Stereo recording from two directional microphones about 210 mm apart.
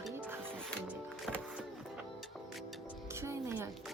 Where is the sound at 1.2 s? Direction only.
Centre (ahead or behind).